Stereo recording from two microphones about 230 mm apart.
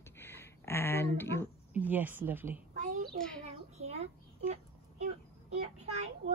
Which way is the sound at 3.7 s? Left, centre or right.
Right.